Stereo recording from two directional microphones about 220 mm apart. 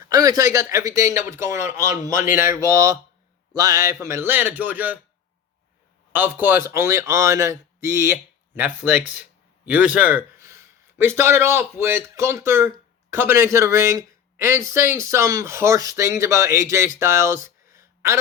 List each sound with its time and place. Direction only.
0.0 s speech: 15° right (ahead or behind)
6.1 s a man's voice: 10° right (ahead or behind)